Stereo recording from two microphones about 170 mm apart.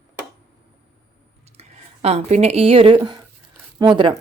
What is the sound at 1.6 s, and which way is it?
A woman's voice, 40° right (ahead or behind).